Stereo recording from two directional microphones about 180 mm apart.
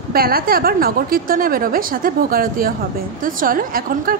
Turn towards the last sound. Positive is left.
turn(degrees=-50)  # may be behind; listen again after turning